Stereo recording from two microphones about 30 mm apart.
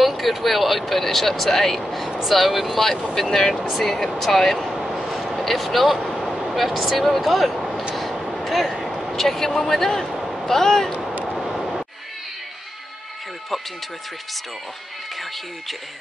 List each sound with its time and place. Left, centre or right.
0.0 s a man's voice: centre
4.6 s a sound: centre
6.7 s speech: centre
7.0 s speech: centre
7.9 s a sound: centre
9.1 s a man's voice: centre
11.3 s vehicle: centre